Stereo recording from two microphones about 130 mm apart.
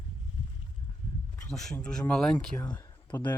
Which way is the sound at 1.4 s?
5° left (ahead or behind).